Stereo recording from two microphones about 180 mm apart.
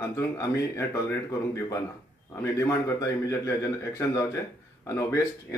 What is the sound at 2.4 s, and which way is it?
Speech, 15° left (ahead or behind).